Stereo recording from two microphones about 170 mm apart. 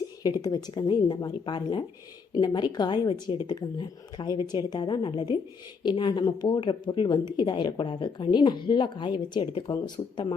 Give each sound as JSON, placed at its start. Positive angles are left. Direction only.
{"t": 0.2, "sound": "a woman's voice", "side_deg": 25}